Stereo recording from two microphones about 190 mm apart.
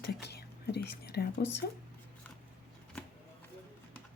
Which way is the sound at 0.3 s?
60° left (ahead or behind).